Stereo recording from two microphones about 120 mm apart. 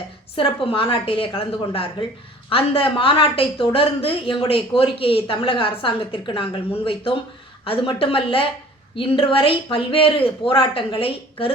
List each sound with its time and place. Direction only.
0.3 s a woman's voice: 45° left (ahead or behind)